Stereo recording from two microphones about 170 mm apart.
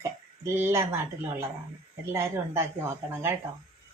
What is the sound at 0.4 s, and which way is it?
A woman's voice, 15° right (ahead or behind).